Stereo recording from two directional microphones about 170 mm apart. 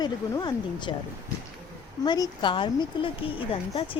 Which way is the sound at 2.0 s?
25° left (ahead or behind).